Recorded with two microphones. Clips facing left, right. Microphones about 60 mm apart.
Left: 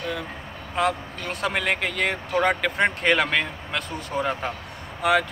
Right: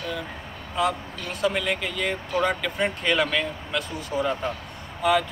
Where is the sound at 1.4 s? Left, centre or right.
Left.